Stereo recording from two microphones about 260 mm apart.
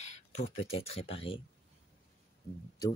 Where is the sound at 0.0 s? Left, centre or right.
Left.